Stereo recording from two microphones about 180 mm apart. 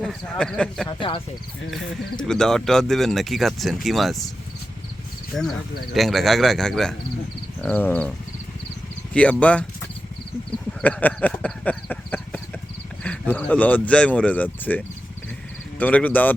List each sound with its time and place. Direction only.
0.0 s speech: centre (ahead or behind)
0.9 s speech: 25° left (ahead or behind)
1.7 s speech: 5° left (ahead or behind)
5.3 s speech: centre (ahead or behind)
9.4 s speech: 5° left (ahead or behind)
10.8 s speech: 10° left (ahead or behind)